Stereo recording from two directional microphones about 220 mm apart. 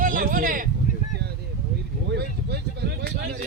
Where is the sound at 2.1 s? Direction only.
50° right (ahead or behind).